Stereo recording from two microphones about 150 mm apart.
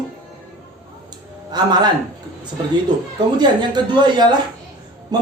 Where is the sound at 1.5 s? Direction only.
30° right (ahead or behind).